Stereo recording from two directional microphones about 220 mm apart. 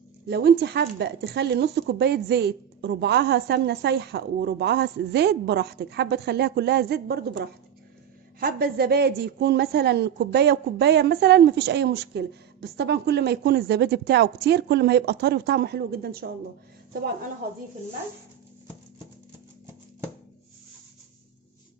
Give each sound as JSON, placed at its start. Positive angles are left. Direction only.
{"t": 0.3, "sound": "a woman's voice", "side_deg": -45}